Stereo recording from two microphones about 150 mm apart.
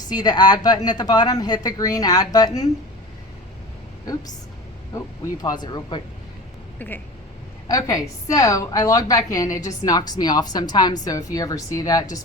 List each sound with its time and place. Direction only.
0.1 s a woman's voice: 25° left (ahead or behind)
4.9 s a woman's voice: 25° left (ahead or behind)
6.7 s a woman's voice: 10° left (ahead or behind)